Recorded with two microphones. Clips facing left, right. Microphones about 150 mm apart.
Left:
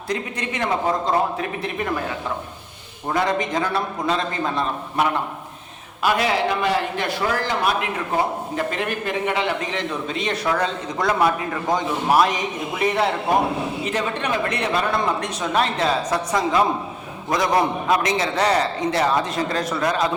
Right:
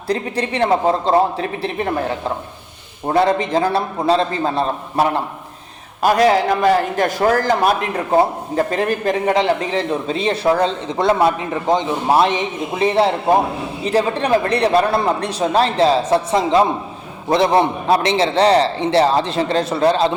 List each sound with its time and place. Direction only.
0.1 s a man's voice: 35° right (ahead or behind)